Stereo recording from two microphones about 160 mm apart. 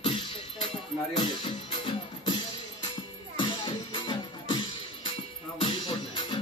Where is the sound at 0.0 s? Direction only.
30° left (ahead or behind).